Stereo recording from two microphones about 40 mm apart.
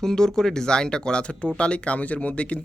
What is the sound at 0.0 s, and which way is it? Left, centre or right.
Speech, centre.